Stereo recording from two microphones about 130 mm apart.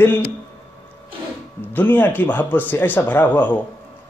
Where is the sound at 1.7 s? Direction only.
15° left (ahead or behind).